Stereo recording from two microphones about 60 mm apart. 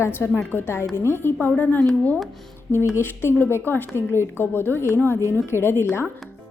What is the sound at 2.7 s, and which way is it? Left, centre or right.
A woman's voice, left.